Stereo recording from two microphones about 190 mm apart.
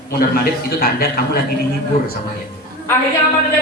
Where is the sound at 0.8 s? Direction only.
55° left (ahead or behind).